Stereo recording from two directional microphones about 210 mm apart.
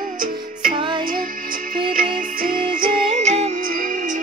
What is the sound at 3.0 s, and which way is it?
Music, 30° right (ahead or behind).